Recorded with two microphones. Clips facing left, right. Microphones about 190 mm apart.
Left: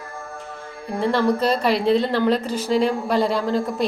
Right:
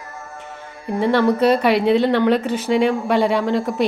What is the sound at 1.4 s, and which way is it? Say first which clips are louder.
Speech: right 4 dB; 60° right (ahead or behind).